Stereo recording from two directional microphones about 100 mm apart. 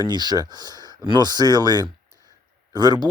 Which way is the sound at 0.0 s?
45° right (ahead or behind).